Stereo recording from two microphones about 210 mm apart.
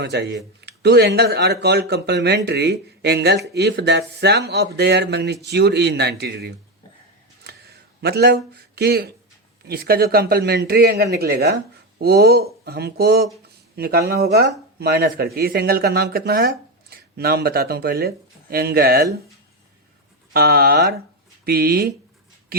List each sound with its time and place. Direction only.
0.0 s speech: 55° right (ahead or behind)
7.4 s a sound: 50° right (ahead or behind)
9.6 s speech: 45° right (ahead or behind)
20.3 s speech: 45° right (ahead or behind)